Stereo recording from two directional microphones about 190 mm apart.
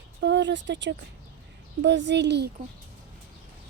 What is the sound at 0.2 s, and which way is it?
Speech, 65° right (ahead or behind).